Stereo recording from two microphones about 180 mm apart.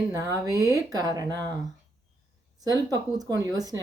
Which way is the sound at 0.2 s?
20° right (ahead or behind).